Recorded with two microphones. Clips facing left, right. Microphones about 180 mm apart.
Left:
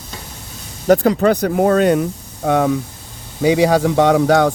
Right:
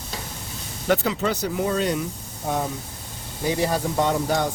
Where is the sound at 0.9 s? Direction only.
50° left (ahead or behind).